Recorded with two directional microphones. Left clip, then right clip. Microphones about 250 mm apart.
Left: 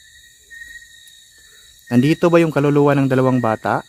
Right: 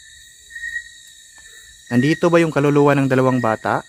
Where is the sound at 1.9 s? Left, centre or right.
Centre.